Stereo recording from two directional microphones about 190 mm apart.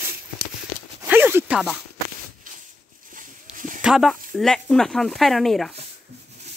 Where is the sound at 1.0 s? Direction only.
10° right (ahead or behind).